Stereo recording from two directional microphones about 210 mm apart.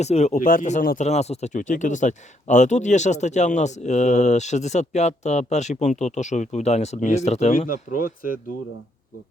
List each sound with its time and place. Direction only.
0.0 s speech: 30° left (ahead or behind)